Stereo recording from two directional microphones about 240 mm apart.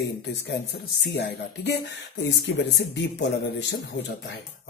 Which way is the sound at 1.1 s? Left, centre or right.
Left.